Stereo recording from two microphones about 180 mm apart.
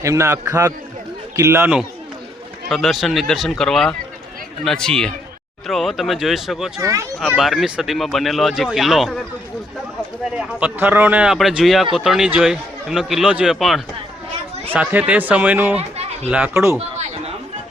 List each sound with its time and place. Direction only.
0.0 s speech: 15° right (ahead or behind)
2.6 s speech: centre (ahead or behind)
10.3 s speech: 10° right (ahead or behind)